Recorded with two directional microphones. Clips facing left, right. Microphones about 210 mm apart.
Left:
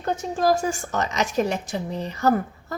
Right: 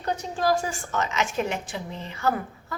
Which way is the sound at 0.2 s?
45° left (ahead or behind).